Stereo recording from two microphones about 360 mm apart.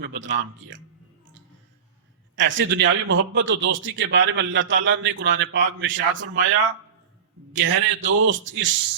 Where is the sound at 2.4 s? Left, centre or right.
Right.